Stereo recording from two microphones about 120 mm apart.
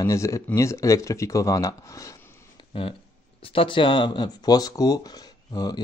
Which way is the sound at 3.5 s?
45° left (ahead or behind).